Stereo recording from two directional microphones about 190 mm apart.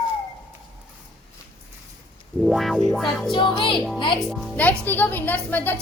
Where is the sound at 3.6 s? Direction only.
25° left (ahead or behind).